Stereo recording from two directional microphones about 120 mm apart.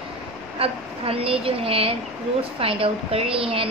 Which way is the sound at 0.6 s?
50° right (ahead or behind).